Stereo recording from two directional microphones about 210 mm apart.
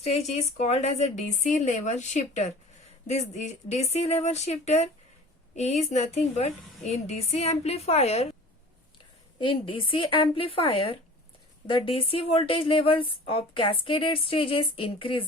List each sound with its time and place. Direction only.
0.0 s a woman's voice: 30° left (ahead or behind)
9.4 s speech: 25° left (ahead or behind)